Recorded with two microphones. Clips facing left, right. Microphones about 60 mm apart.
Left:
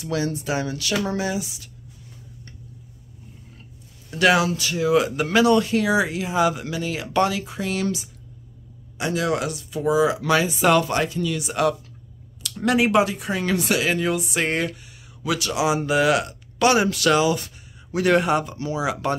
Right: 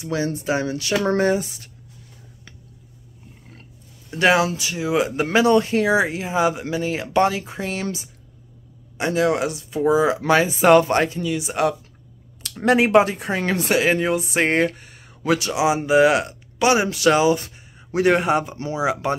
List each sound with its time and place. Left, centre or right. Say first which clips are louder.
0.0 s speech: right 1 dB; right
1.0 s speech: right 6 dB; right
4.1 s speech: right 1 dB; right
11.2 s speech: right 1 dB; right